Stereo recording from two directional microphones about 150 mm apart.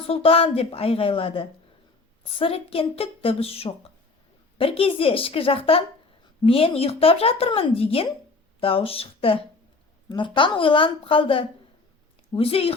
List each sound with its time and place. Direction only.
0.0 s speech: 40° left (ahead or behind)